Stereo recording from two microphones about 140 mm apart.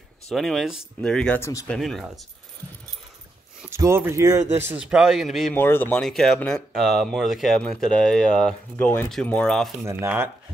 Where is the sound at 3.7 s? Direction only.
20° right (ahead or behind).